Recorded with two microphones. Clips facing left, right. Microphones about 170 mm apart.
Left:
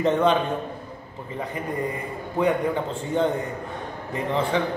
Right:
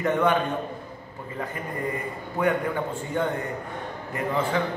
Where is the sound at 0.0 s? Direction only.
25° left (ahead or behind).